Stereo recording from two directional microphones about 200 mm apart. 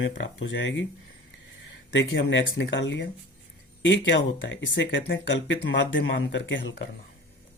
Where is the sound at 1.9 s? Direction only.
65° left (ahead or behind).